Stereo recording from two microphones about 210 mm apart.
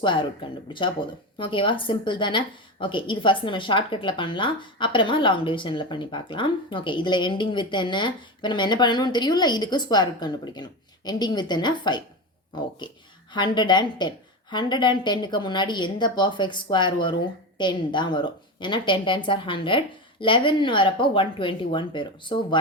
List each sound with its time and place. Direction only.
0.0 s a woman's voice: 20° left (ahead or behind)